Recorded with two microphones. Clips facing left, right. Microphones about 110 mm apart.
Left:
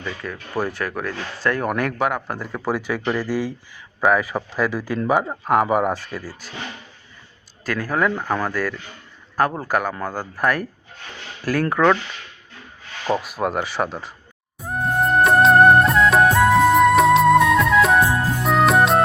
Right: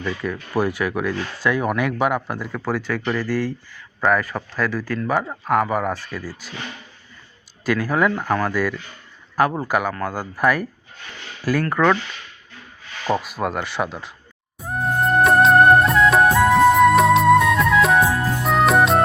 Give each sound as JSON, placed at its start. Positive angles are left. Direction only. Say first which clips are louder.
{"t": 0.2, "sound": "speech", "louder": "right 3 dB", "side_deg": -10}
{"t": 2.5, "sound": "speech", "louder": "left 1 dB", "side_deg": 10}
{"t": 7.6, "sound": "speech", "louder": "right 2 dB", "side_deg": -5}
{"t": 11.7, "sound": "speech", "louder": "left 1 dB", "side_deg": 5}
{"t": 13.1, "sound": "speech", "louder": "even", "side_deg": 0}
{"t": 14.6, "sound": "music", "louder": "even", "side_deg": 0}